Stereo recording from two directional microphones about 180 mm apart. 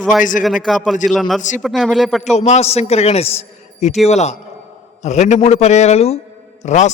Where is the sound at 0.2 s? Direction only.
45° left (ahead or behind).